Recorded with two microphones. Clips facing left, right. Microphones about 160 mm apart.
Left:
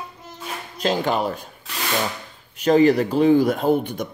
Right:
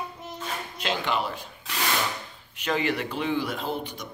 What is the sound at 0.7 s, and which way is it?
Speech, 40° left (ahead or behind).